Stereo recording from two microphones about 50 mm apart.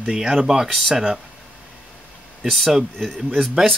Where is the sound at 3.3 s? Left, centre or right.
Centre.